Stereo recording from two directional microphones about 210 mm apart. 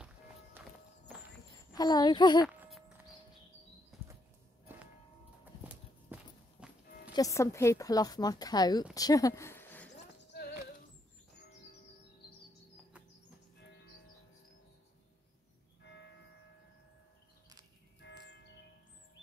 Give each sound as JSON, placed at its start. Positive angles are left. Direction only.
{"t": 0.6, "sound": "walk", "side_deg": -10}
{"t": 1.7, "sound": "a child's voice", "side_deg": 20}
{"t": 2.4, "sound": "horse", "side_deg": -5}
{"t": 3.9, "sound": "a sound", "side_deg": 0}
{"t": 5.4, "sound": "walk", "side_deg": -10}
{"t": 7.1, "sound": "a woman's voice", "side_deg": 15}
{"t": 15.8, "sound": "church bell", "side_deg": 60}
{"t": 18.0, "sound": "church bell", "side_deg": 55}